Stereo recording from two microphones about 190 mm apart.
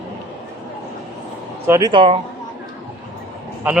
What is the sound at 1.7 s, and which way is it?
Speech, 20° right (ahead or behind).